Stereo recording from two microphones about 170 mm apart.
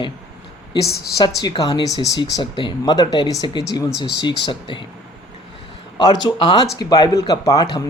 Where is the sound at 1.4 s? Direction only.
25° left (ahead or behind).